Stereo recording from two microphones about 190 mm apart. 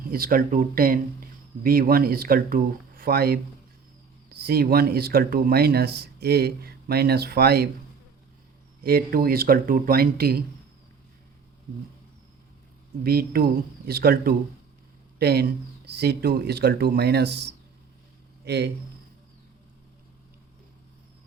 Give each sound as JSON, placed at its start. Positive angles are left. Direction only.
{"t": 0.1, "sound": "speech", "side_deg": -50}
{"t": 4.4, "sound": "speech", "side_deg": -55}
{"t": 8.8, "sound": "speech", "side_deg": -55}
{"t": 13.0, "sound": "speech", "side_deg": -55}